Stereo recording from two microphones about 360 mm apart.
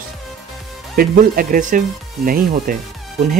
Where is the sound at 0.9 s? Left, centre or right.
Right.